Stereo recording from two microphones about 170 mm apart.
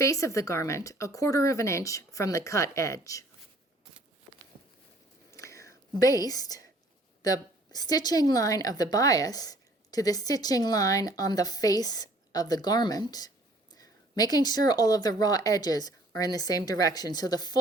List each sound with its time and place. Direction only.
0.0 s a woman's voice: 20° left (ahead or behind)
5.3 s a sound: 15° left (ahead or behind)
7.2 s a woman's voice: 20° left (ahead or behind)